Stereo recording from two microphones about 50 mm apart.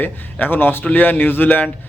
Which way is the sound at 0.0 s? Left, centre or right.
Left.